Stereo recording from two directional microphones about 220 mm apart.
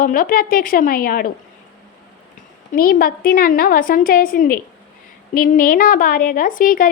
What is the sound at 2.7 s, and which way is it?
A woman's voice, 40° left (ahead or behind).